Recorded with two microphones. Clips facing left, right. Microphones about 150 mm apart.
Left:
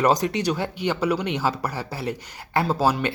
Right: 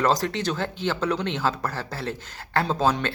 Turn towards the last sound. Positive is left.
turn(degrees=10)  # may be behind; listen again after turning